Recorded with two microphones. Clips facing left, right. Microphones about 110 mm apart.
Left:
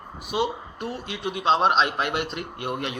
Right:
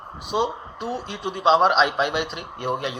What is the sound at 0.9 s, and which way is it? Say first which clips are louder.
Speech: right 1 dB; 55° left (ahead or behind).